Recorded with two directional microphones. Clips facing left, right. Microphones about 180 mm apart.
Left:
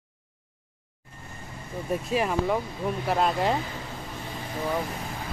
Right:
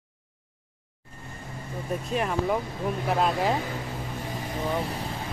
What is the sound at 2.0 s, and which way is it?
Speech, 5° left (ahead or behind).